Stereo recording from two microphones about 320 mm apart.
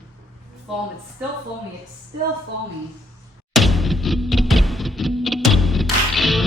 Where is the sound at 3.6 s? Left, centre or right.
Centre.